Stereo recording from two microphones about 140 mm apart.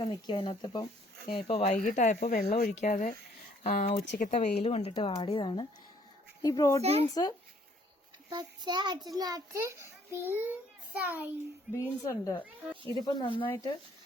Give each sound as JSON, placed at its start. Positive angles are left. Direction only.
{"t": 0.0, "sound": "speech", "side_deg": 35}
{"t": 1.7, "sound": "speech", "side_deg": 65}
{"t": 2.8, "sound": "speech", "side_deg": 60}
{"t": 3.6, "sound": "speech", "side_deg": 75}
{"t": 3.8, "sound": "speech", "side_deg": 65}
{"t": 4.4, "sound": "a woman's voice", "side_deg": 50}
{"t": 6.8, "sound": "speech", "side_deg": -45}
{"t": 7.1, "sound": "a child's voice", "side_deg": 30}
{"t": 8.3, "sound": "a child's voice", "side_deg": -30}
{"t": 12.0, "sound": "a child's voice", "side_deg": 25}
{"t": 13.4, "sound": "speech", "side_deg": 15}